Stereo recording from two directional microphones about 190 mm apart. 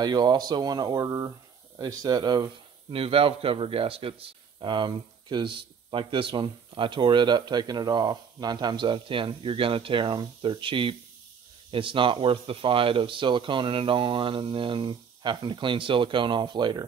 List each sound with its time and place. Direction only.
0.0 s speech: 20° right (ahead or behind)